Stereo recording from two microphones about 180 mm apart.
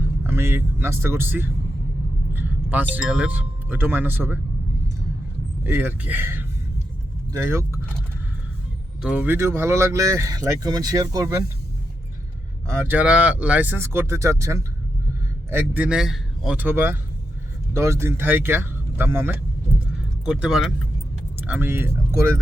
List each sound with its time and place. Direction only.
0.3 s speech: 10° right (ahead or behind)
5.6 s speech: 10° right (ahead or behind)
9.0 s speech: 5° right (ahead or behind)
12.6 s speech: 15° right (ahead or behind)